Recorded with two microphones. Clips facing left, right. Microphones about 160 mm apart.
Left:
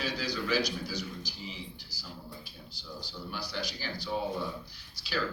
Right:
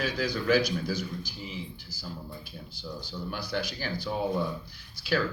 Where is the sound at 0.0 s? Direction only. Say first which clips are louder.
Right 5 dB; 50° right (ahead or behind).